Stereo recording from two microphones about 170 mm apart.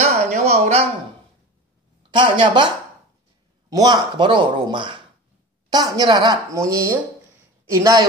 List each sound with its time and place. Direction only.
0.3 s a sound: 40° right (ahead or behind)
2.0 s speech: 30° right (ahead or behind)
3.7 s speech: 25° right (ahead or behind)